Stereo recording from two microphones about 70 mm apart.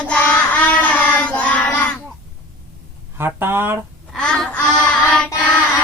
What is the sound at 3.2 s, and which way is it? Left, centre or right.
Speech, right.